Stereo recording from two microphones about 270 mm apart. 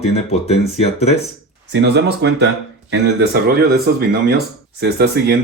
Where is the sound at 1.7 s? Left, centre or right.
Right.